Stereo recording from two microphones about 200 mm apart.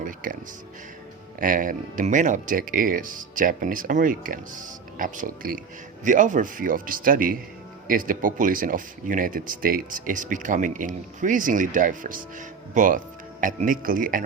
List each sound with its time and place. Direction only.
0.0 s music: 45° right (ahead or behind)
1.4 s speech: 40° right (ahead or behind)